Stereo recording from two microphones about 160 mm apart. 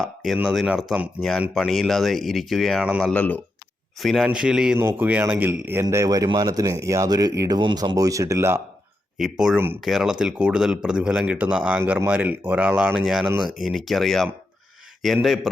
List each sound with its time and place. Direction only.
0.0 s speech: centre (ahead or behind)
3.1 s a man's voice: 10° left (ahead or behind); by 8.6 s 15° right (ahead or behind)
9.1 s speech: 5° right (ahead or behind)